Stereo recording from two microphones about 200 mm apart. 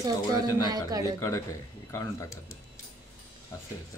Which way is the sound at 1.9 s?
15° left (ahead or behind).